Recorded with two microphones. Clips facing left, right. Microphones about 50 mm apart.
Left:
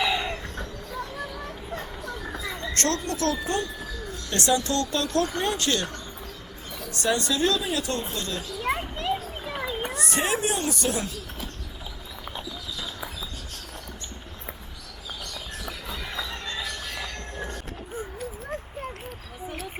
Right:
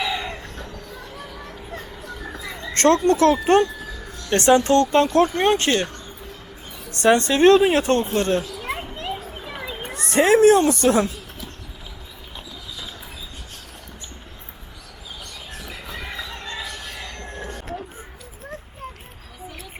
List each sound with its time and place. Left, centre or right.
0.0 s chicken: centre
0.9 s a sound: centre
2.7 s speech: right
3.4 s speech: right
4.3 s speech: right
9.4 s children playing: centre
9.9 s children playing: right
10.2 s speech: right
15.6 s a sound: centre
17.3 s vehicle: centre